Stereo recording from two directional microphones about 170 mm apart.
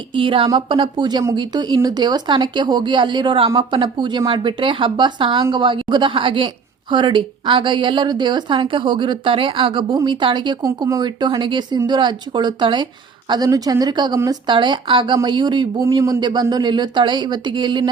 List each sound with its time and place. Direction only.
0.1 s a woman's voice: 30° right (ahead or behind)